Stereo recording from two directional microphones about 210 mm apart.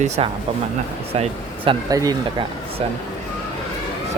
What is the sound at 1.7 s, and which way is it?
Speech, 15° right (ahead or behind).